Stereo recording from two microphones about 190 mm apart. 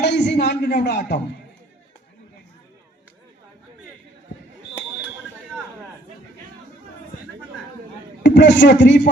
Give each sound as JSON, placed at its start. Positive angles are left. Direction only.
{"t": 0.0, "sound": "a woman's voice", "side_deg": 65}
{"t": 8.2, "sound": "a man's voice", "side_deg": 70}